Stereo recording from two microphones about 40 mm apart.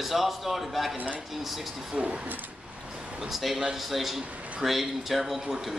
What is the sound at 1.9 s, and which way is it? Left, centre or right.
Speech, right.